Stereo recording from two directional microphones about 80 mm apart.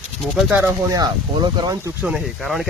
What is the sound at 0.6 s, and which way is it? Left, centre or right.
Speech, right.